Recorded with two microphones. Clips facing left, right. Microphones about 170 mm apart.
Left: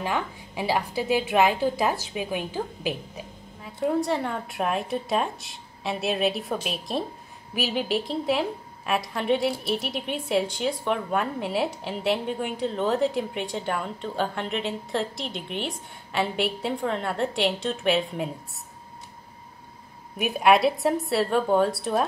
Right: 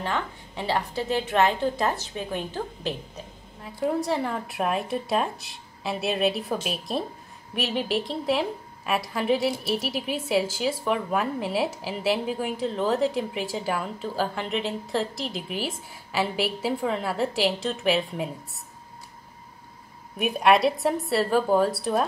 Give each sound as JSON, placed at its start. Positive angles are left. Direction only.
{"t": 0.0, "sound": "a woman's voice", "side_deg": 10}
{"t": 3.6, "sound": "a woman's voice", "side_deg": 0}
{"t": 20.2, "sound": "a woman's voice", "side_deg": 0}